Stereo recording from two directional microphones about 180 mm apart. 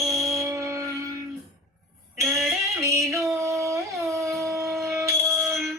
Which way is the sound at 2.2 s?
Centre (ahead or behind).